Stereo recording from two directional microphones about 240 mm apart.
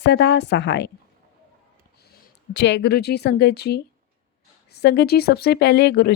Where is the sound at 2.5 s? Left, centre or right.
Left.